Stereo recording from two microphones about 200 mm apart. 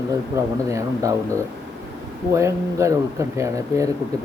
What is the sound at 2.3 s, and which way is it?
Speech, 15° right (ahead or behind).